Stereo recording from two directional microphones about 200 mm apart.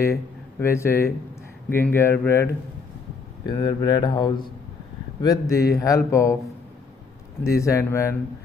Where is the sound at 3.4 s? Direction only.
20° left (ahead or behind).